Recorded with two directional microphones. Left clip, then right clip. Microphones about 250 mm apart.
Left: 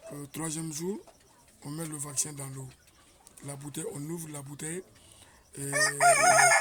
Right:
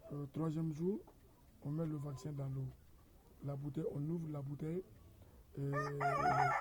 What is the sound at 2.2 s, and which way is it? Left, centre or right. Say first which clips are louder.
Speech: left 12 dB; centre.